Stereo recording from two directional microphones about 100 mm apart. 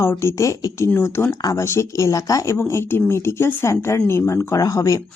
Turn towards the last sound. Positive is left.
turn(degrees=35)  # may be behind; listen again after turning